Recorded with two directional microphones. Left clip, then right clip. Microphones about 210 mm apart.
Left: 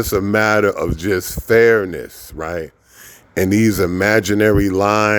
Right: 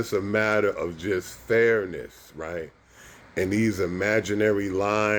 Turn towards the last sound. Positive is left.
turn(degrees=55)  # may be behind; listen again after turning